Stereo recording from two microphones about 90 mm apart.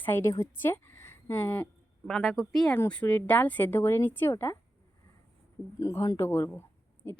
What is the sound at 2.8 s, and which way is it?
A woman's voice, 15° left (ahead or behind).